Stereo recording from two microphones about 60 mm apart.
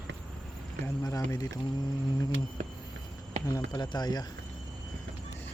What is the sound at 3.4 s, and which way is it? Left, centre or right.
Speech, left.